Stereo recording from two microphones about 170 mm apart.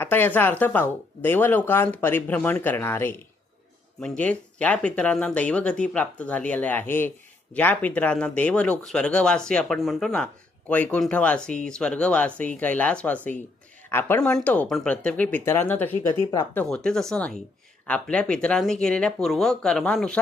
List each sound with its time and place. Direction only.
0.0 s speech: 10° left (ahead or behind)
4.2 s speech: 10° left (ahead or behind)
16.6 s speech: 5° left (ahead or behind)